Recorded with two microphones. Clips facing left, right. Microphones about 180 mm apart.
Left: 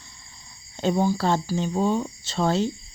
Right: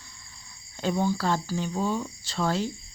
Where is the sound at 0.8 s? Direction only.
25° left (ahead or behind).